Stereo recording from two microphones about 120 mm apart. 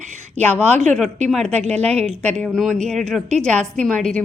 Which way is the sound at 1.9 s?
65° right (ahead or behind).